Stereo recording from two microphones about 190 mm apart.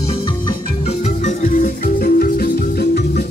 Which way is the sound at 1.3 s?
45° left (ahead or behind).